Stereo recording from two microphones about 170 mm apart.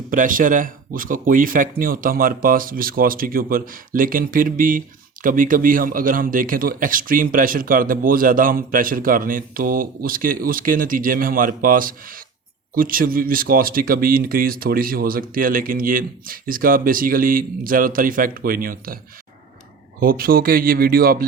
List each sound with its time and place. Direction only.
0.1 s a man's voice: 55° right (ahead or behind)
20.0 s a man's voice: 60° right (ahead or behind)